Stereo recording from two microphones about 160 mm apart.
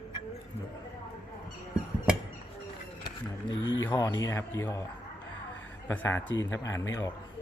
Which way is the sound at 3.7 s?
25° left (ahead or behind).